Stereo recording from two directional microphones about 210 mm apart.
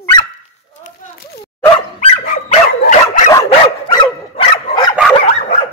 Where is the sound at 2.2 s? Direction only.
35° left (ahead or behind).